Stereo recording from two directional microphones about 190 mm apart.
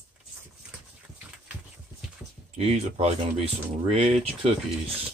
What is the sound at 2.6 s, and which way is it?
Speech, 35° right (ahead or behind).